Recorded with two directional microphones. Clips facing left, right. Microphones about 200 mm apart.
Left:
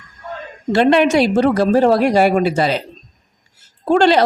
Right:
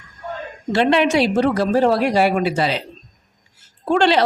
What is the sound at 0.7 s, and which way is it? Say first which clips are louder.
Speech: left 3 dB; 45° left (ahead or behind).